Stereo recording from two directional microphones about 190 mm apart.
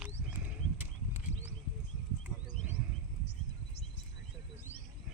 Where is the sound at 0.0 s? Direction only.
10° right (ahead or behind).